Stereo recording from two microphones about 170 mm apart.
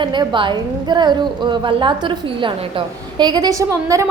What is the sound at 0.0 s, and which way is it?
A woman's voice, 25° right (ahead or behind).